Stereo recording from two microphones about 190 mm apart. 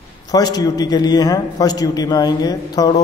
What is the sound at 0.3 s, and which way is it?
A man's voice, 20° left (ahead or behind).